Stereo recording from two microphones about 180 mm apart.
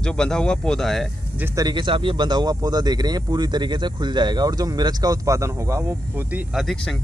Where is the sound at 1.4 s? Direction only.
20° right (ahead or behind).